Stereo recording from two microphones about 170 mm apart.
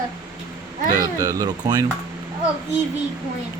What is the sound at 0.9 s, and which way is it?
Speech, 20° right (ahead or behind).